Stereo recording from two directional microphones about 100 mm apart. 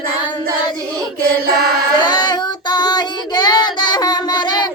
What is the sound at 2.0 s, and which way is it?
Child singing, 50° left (ahead or behind).